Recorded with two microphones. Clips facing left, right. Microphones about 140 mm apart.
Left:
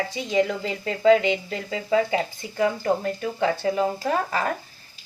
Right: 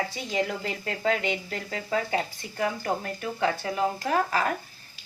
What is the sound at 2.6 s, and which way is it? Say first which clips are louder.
Speech: left 6 dB; 30° left (ahead or behind).